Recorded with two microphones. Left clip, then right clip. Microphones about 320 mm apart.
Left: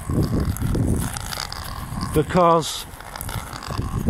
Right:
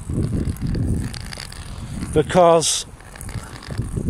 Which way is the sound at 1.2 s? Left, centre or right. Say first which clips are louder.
Left 5 dB; left.